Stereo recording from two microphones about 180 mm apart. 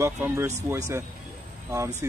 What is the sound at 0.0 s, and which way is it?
A man's voice, 15° right (ahead or behind).